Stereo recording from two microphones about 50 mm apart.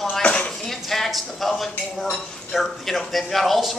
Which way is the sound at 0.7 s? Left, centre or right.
Centre.